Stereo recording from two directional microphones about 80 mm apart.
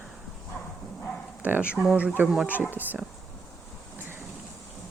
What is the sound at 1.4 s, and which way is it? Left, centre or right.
Speech, right.